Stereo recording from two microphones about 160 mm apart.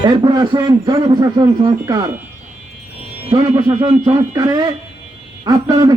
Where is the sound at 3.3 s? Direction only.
25° right (ahead or behind).